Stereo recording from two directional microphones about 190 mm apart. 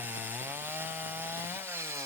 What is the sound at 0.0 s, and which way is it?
Chainsaw, 10° right (ahead or behind).